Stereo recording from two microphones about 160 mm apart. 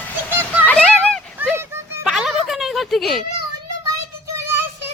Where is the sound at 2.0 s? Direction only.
Centre (ahead or behind).